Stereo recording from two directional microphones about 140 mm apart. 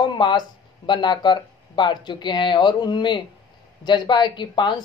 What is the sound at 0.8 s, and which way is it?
Speech, 35° left (ahead or behind).